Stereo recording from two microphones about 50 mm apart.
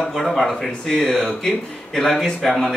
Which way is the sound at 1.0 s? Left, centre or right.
Centre.